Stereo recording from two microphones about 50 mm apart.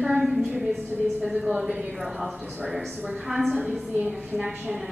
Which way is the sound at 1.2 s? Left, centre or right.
Centre.